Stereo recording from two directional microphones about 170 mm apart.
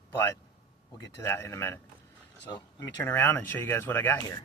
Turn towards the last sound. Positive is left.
turn(degrees=10)  # may be behind; listen again after turning